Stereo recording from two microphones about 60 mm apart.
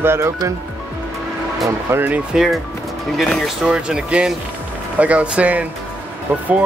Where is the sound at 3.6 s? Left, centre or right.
Centre.